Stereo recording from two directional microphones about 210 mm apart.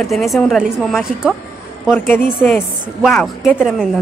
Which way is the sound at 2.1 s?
10° left (ahead or behind).